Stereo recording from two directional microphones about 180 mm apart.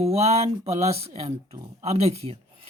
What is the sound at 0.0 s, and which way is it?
Speech, 35° right (ahead or behind).